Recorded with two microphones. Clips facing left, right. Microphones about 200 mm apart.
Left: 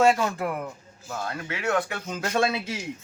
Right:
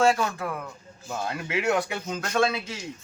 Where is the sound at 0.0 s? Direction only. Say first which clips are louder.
Left 2 dB; 25° left (ahead or behind).